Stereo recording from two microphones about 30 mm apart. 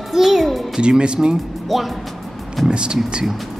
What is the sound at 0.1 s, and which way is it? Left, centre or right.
Music, centre.